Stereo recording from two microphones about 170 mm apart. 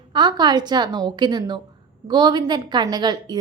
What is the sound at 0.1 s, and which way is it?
A woman's voice, 25° right (ahead or behind).